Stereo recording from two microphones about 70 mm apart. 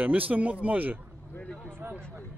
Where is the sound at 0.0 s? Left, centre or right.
Right.